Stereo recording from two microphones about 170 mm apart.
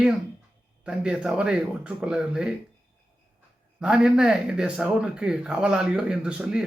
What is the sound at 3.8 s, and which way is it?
Speech, 5° right (ahead or behind).